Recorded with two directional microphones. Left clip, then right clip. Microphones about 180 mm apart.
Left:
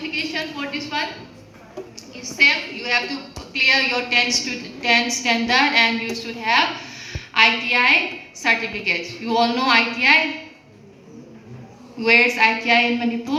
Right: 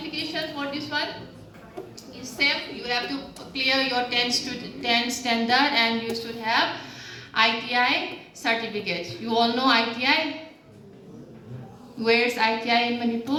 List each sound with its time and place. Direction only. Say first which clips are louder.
0.1 s a woman's voice: left 3 dB; 30° right (ahead or behind)
2.4 s a woman's voice: left 8 dB; 25° right (ahead or behind)
11.9 s a woman's voice: left 6 dB; 25° right (ahead or behind)